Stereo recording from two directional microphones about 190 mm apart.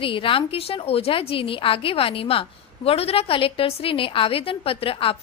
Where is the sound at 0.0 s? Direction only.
30° left (ahead or behind).